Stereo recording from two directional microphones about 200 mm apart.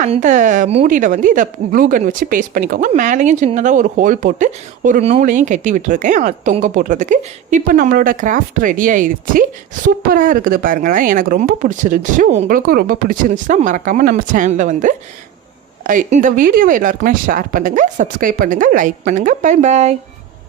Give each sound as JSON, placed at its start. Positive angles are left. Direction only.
{"t": 0.0, "sound": "speech", "side_deg": -40}